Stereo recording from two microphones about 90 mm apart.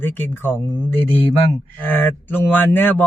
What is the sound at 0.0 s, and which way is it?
Speech, 25° left (ahead or behind).